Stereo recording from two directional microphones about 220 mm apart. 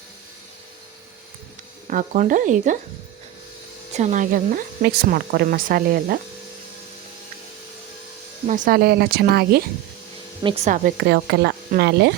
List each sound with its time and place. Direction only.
1.9 s speech: 35° right (ahead or behind)
3.9 s speech: 35° right (ahead or behind)
8.4 s speech: 35° right (ahead or behind)
10.4 s speech: 25° right (ahead or behind)
10.8 s speech: 50° right (ahead or behind)